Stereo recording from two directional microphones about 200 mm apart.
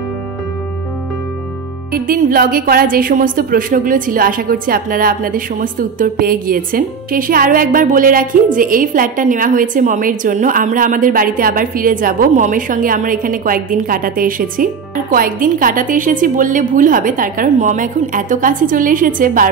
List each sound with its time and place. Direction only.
1.9 s a woman's voice: 45° right (ahead or behind)